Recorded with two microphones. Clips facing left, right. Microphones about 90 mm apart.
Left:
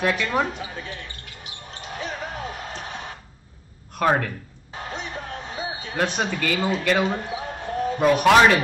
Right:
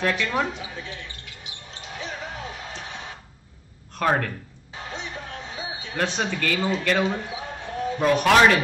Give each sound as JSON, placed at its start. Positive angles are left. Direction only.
{"t": 0.0, "sound": "speech", "side_deg": 10}
{"t": 0.5, "sound": "basketball bounce", "side_deg": 50}
{"t": 3.9, "sound": "speech", "side_deg": 10}
{"t": 4.7, "sound": "music", "side_deg": 45}
{"t": 6.1, "sound": "speech", "side_deg": 10}
{"t": 7.1, "sound": "a sound", "side_deg": 45}
{"t": 8.0, "sound": "speech", "side_deg": 10}